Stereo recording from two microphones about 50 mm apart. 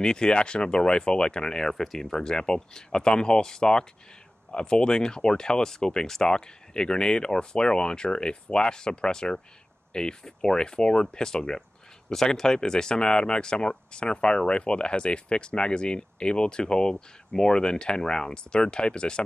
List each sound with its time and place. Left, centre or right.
0.0 s speech: centre